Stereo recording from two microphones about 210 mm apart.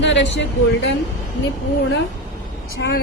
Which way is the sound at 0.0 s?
60° left (ahead or behind).